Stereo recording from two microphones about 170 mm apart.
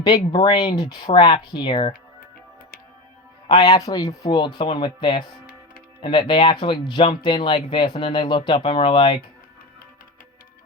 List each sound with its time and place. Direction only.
0.0 s speech: 25° left (ahead or behind)
3.4 s speech: 25° left (ahead or behind)